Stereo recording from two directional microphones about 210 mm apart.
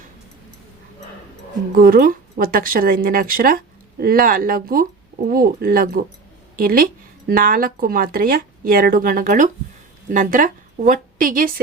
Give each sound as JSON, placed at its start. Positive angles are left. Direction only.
{"t": 1.7, "sound": "a woman's voice", "side_deg": -45}